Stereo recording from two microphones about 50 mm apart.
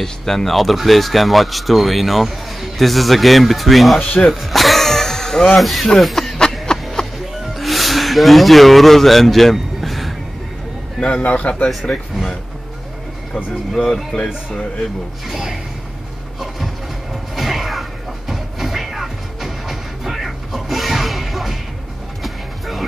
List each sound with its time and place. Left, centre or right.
0.0 s speech: centre
6.6 s a sound: centre
7.5 s music: centre
11.0 s a man's voice: centre
11.2 s speech: left
14.1 s speech: left
15.2 s speech: centre
16.3 s a sound: centre
18.3 s music: centre